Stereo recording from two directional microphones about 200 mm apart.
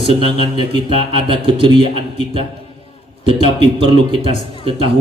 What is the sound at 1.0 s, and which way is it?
Speech, 25° right (ahead or behind).